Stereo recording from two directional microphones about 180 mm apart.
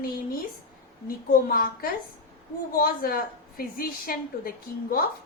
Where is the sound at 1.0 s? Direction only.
55° left (ahead or behind).